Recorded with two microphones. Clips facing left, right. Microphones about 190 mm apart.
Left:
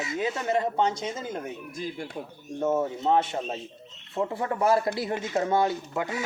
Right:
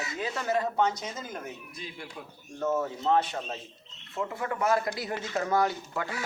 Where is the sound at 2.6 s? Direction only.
25° left (ahead or behind).